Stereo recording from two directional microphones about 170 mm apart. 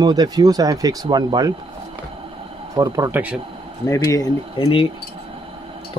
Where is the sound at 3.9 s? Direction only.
20° left (ahead or behind).